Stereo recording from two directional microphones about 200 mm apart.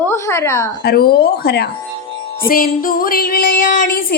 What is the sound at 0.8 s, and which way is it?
Music, 50° left (ahead or behind).